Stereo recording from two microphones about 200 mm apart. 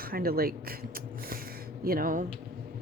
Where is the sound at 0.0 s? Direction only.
45° right (ahead or behind).